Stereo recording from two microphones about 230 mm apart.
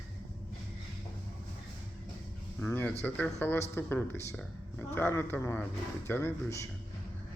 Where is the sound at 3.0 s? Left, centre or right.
Centre.